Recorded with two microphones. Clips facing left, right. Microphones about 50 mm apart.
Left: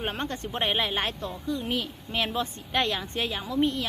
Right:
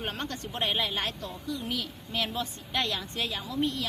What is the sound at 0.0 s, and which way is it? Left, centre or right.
Speech, left.